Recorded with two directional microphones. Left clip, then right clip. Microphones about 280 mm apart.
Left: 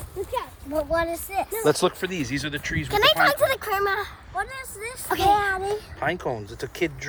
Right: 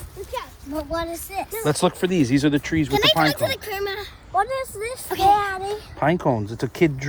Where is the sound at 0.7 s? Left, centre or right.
Centre.